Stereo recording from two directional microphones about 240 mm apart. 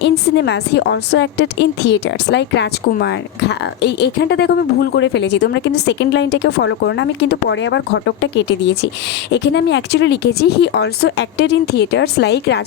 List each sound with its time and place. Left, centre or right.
0.0 s a woman's voice: left